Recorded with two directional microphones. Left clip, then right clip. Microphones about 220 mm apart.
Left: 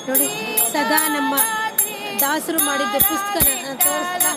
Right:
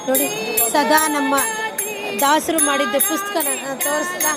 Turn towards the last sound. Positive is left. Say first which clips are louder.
# right 1 dB
turn(degrees=35)  # may be behind; listen again after turning